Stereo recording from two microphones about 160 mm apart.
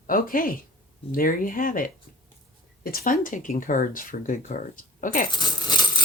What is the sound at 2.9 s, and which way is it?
Speech, 60° left (ahead or behind).